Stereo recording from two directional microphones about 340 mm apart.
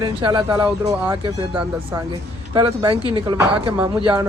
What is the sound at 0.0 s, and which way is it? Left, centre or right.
A man's voice, centre.